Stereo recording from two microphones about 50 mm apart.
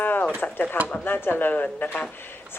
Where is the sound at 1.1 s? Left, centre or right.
Left.